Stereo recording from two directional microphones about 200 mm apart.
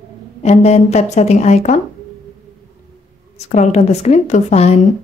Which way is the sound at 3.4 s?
35° left (ahead or behind).